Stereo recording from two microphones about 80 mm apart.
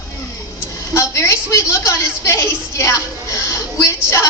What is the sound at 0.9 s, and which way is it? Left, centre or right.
A woman's voice, left.